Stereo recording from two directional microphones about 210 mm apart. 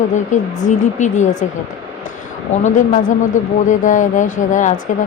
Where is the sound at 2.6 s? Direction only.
35° left (ahead or behind).